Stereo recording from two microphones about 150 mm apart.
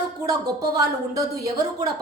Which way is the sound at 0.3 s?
25° right (ahead or behind).